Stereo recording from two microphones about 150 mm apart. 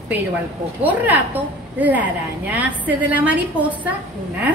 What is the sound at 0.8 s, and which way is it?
A woman's voice, 10° right (ahead or behind).